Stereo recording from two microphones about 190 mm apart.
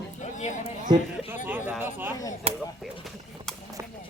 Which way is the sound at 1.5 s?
10° right (ahead or behind).